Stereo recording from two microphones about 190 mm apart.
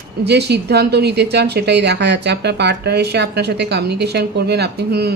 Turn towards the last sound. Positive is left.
turn(degrees=-55)  # may be behind; listen again after turning